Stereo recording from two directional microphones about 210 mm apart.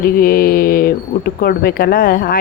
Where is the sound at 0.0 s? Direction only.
45° left (ahead or behind).